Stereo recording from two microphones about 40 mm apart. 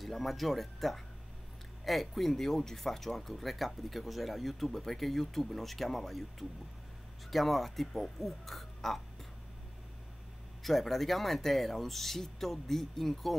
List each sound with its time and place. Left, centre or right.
0.0 s speech: centre
7.2 s speech: centre
10.6 s speech: centre